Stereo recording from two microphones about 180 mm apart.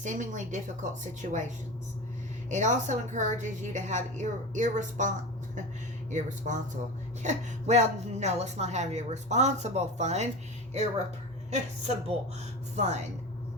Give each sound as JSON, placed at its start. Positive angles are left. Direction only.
{"t": 0.0, "sound": "a woman's voice", "side_deg": -45}
{"t": 2.5, "sound": "a woman's voice", "side_deg": -40}
{"t": 11.5, "sound": "a woman's voice", "side_deg": -40}